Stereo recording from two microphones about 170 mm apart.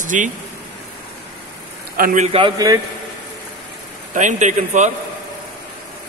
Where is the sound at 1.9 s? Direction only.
60° right (ahead or behind).